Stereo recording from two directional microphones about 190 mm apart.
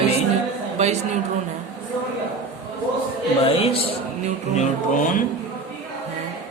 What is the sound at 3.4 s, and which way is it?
Speech, 30° left (ahead or behind).